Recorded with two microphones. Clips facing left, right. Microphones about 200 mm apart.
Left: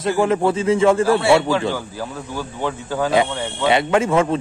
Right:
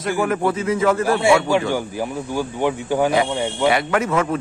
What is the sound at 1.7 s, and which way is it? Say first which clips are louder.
Speech: right 3 dB; 15° right (ahead or behind).